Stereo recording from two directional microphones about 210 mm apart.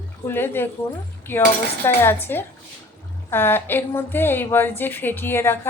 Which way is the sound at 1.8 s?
10° left (ahead or behind).